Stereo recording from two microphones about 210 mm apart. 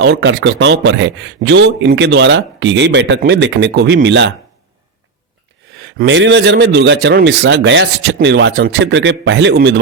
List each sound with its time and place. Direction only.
0.0 s a man's voice: 55° right (ahead or behind)
5.8 s a man's voice: 55° right (ahead or behind)